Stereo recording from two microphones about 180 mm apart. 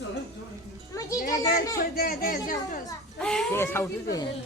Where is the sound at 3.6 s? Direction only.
15° left (ahead or behind).